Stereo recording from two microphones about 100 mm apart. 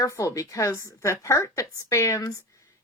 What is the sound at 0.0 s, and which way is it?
A woman's voice, 35° left (ahead or behind).